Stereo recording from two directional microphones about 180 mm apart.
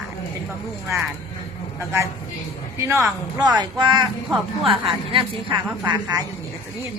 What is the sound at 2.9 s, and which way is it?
A woman's voice, 15° right (ahead or behind).